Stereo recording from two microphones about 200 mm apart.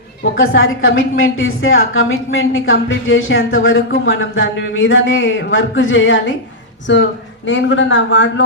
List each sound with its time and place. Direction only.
0.2 s a woman's voice: 75° left (ahead or behind)
7.4 s speech: 65° left (ahead or behind)